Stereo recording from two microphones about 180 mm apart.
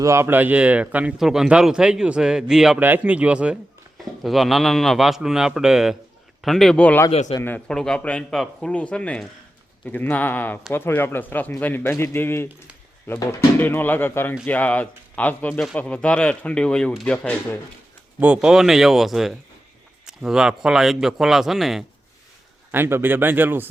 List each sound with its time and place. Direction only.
0.0 s speech: 15° right (ahead or behind); by 7.1 s 10° left (ahead or behind)
7.1 s a man's voice: 35° left (ahead or behind)
7.3 s speech: 10° left (ahead or behind)
18.2 s speech: 5° right (ahead or behind)
22.7 s speech: 10° right (ahead or behind)